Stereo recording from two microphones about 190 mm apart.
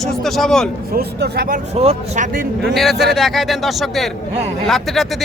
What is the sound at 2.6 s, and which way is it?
Speech, centre (ahead or behind).